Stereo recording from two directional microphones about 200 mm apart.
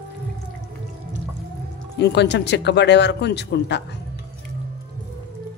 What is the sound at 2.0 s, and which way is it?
Speech, 60° left (ahead or behind).